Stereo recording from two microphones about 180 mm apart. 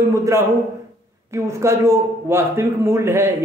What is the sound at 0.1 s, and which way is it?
A man's voice, 15° right (ahead or behind).